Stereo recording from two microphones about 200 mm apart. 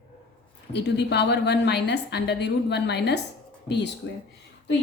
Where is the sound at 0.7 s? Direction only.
60° left (ahead or behind).